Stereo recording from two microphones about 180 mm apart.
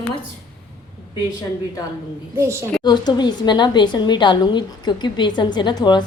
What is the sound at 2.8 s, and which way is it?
A woman's voice, 25° left (ahead or behind).